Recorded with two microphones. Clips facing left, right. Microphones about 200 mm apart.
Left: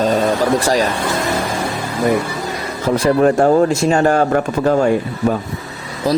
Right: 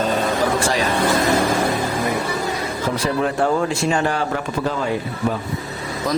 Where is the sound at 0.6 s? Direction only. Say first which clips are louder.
Left 5 dB; 40° left (ahead or behind).